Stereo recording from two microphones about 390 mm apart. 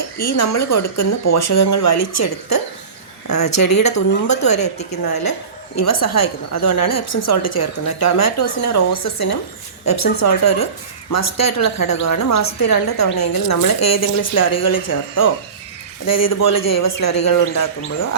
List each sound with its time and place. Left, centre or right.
0.2 s a woman's voice: left